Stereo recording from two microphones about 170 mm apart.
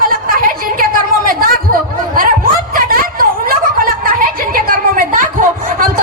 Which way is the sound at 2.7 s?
55° right (ahead or behind).